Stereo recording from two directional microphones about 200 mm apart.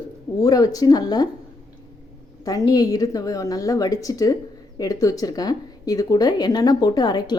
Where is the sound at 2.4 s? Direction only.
15° left (ahead or behind).